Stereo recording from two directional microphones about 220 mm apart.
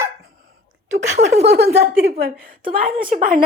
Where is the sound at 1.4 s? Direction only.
45° right (ahead or behind).